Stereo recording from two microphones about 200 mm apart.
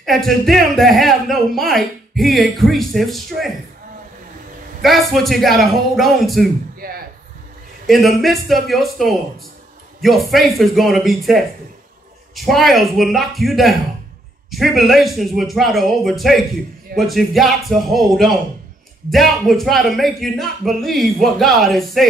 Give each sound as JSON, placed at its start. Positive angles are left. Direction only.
{"t": 0.0, "sound": "speech", "side_deg": 0}
{"t": 4.8, "sound": "speech", "side_deg": 0}
{"t": 6.8, "sound": "a sound", "side_deg": -45}
{"t": 7.8, "sound": "speech", "side_deg": 0}